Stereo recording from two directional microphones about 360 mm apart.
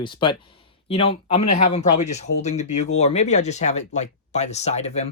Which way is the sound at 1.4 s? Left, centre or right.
Left.